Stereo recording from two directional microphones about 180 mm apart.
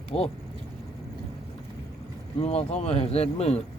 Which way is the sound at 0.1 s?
30° left (ahead or behind).